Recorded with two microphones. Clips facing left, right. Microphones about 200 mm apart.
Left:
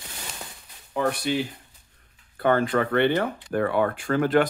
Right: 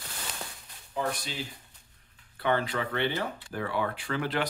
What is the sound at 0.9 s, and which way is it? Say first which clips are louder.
Speech: left 8 dB; 65° left (ahead or behind).